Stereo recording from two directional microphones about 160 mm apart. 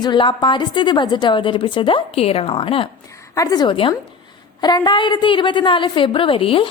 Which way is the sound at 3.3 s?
20° left (ahead or behind).